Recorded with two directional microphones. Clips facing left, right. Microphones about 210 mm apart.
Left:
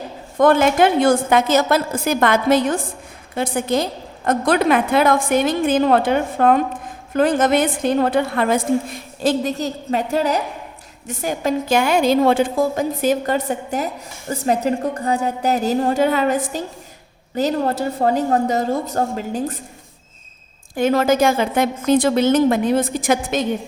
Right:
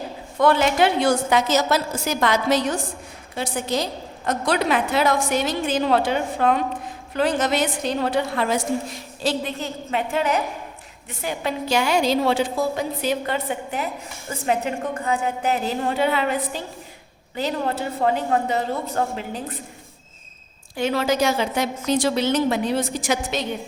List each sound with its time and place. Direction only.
0.3 s a woman's voice: 50° left (ahead or behind)
20.7 s a woman's voice: 50° left (ahead or behind)